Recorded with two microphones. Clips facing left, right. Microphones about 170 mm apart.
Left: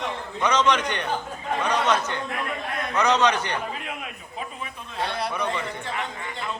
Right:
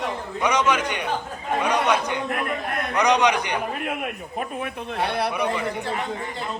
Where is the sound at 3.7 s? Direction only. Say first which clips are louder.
Right 6 dB; 55° right (ahead or behind).